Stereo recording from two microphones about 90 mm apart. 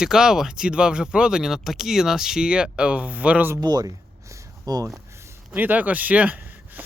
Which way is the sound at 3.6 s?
45° right (ahead or behind).